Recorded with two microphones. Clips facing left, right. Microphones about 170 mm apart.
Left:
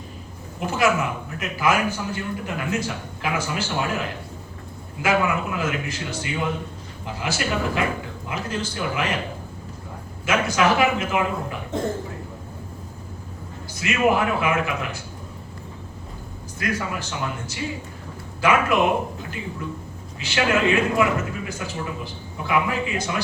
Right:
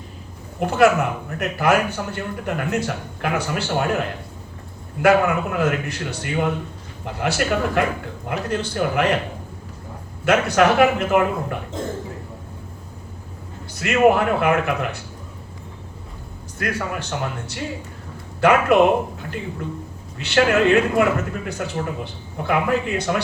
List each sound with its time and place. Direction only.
0.6 s speech: 60° right (ahead or behind)
10.2 s speech: 65° right (ahead or behind)
13.7 s speech: 60° right (ahead or behind)
16.6 s speech: 60° right (ahead or behind)
20.1 s speech: 60° right (ahead or behind)